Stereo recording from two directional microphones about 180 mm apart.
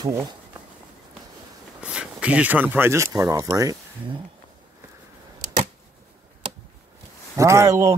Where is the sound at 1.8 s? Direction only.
5° right (ahead or behind).